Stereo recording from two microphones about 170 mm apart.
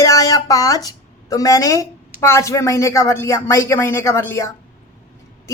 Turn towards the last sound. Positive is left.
turn(degrees=15)  # may be behind; listen again after turning